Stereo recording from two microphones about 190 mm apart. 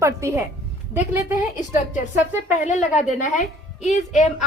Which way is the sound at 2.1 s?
10° right (ahead or behind).